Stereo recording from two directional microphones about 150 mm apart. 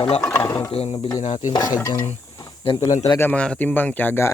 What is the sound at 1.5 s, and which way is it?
Speech, 25° left (ahead or behind).